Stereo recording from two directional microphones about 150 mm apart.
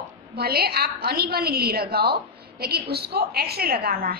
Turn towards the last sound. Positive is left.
turn(degrees=-85)